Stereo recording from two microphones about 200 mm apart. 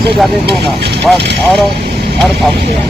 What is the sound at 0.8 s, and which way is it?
Vehicle, 55° right (ahead or behind).